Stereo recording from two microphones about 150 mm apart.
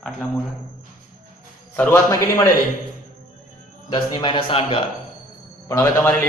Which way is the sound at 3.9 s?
30° left (ahead or behind).